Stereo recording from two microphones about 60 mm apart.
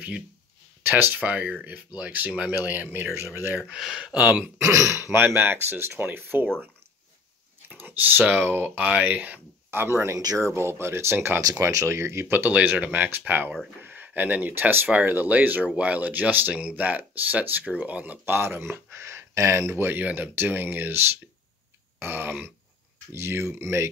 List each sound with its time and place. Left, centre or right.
0.8 s speech: right
2.6 s speech: right
3.5 s speech: centre
4.0 s speech: right
4.6 s speech: right
5.2 s speech: right
7.6 s speech: right
9.7 s speech: right
11.6 s speech: right
12.3 s speech: right
18.2 s speech: right